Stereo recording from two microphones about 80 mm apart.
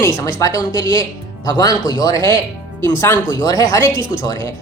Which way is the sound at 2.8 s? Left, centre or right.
Left.